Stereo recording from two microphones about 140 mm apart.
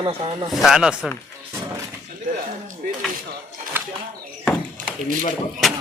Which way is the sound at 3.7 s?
15° right (ahead or behind).